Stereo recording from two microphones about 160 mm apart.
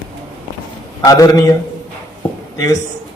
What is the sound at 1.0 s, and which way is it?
Speech, 25° left (ahead or behind).